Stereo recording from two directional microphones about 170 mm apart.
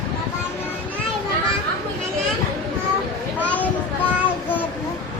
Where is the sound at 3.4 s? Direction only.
10° left (ahead or behind).